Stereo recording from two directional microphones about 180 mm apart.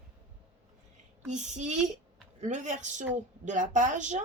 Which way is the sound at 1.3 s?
40° right (ahead or behind).